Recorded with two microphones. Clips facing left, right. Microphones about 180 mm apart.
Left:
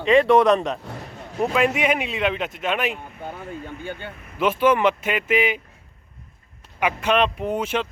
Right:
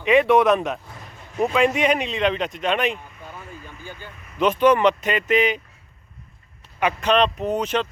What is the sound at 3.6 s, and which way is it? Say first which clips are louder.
Vehicle: left 6 dB; 65° left (ahead or behind).